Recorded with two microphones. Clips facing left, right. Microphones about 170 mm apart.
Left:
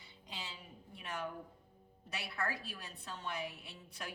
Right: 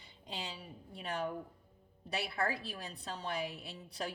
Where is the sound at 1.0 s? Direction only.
35° right (ahead or behind).